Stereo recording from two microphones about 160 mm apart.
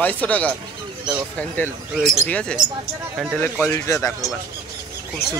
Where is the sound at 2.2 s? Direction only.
10° left (ahead or behind).